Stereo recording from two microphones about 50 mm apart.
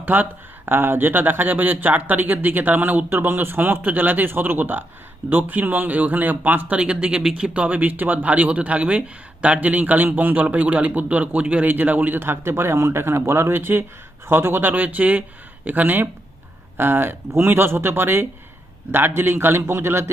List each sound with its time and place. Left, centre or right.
0.0 s speech: right
6.7 s speech: right
14.7 s speech: right
16.7 s speech: right